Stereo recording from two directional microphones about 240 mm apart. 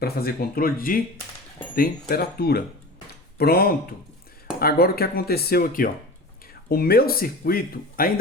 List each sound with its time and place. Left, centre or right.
0.0 s speech: left